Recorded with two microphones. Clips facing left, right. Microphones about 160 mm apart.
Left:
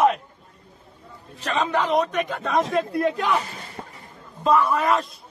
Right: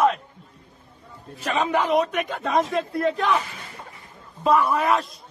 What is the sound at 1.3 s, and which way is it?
Speech, 10° right (ahead or behind).